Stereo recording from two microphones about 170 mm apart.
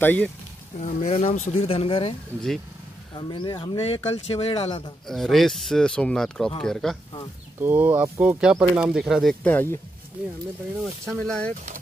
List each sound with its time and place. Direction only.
0.0 s speech: 10° left (ahead or behind)
0.7 s speech: 40° left (ahead or behind)
3.2 s speech: 25° left (ahead or behind)
5.0 s speech: centre (ahead or behind)
7.6 s speech: 10° right (ahead or behind); by 9.8 s 10° left (ahead or behind)
10.8 s speech: 5° left (ahead or behind)